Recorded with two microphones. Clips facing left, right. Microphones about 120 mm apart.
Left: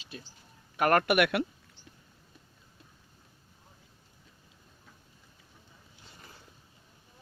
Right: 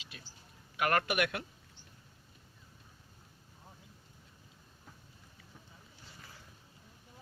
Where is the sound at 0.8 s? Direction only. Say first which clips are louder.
Left 6 dB; 50° left (ahead or behind); by 1.5 s 70° left (ahead or behind).